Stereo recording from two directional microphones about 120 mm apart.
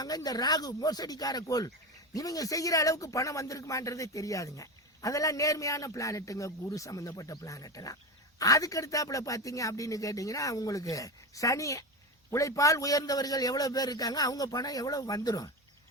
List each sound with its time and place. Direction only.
0.0 s a man's voice: 35° left (ahead or behind)